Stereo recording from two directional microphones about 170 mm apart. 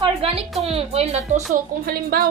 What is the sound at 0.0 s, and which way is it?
A woman's voice, 35° right (ahead or behind).